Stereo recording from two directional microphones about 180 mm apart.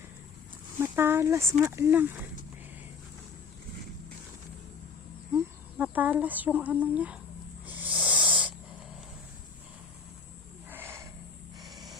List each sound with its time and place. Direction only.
0.8 s speech: 15° right (ahead or behind)
5.3 s speech: 10° right (ahead or behind)
7.7 s owl: 10° right (ahead or behind)
10.7 s a sound: 15° right (ahead or behind)